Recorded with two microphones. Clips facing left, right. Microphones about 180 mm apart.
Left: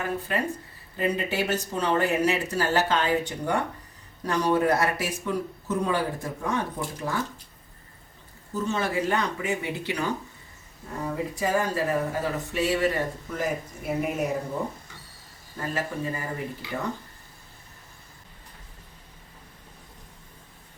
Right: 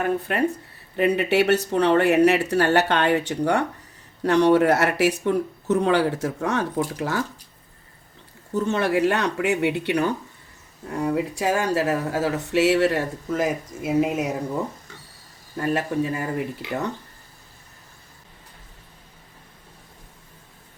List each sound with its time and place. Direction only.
0.0 s speech: 60° right (ahead or behind); by 7.2 s 85° right
8.5 s speech: 65° right (ahead or behind)
10.9 s speech: 80° right
15.6 s speech: 65° right (ahead or behind)